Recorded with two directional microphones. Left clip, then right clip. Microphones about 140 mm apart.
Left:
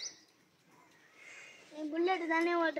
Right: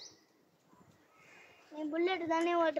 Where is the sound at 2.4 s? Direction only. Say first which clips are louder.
Right 1 dB; 65° right (ahead or behind).